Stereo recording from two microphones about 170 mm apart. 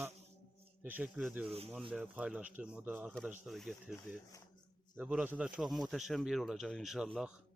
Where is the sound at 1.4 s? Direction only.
35° right (ahead or behind).